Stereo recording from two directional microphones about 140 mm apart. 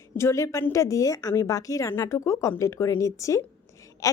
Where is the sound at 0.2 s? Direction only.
20° left (ahead or behind).